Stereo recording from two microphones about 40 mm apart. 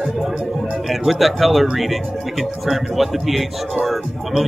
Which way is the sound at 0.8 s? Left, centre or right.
Centre.